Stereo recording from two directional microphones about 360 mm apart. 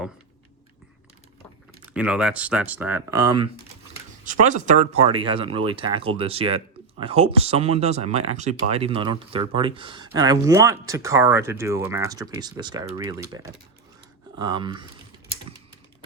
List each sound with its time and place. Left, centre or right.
1.9 s speech: centre